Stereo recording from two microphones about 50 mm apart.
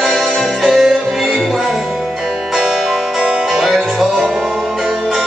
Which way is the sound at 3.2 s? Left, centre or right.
Centre.